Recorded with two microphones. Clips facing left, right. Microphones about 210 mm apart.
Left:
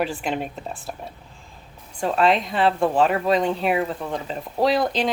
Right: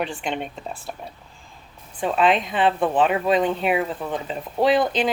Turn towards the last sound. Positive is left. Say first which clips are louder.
# right 1 dB
turn(degrees=0)  # may be behind; listen again after turning